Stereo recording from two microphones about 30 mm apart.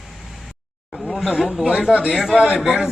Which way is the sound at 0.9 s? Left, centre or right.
Centre.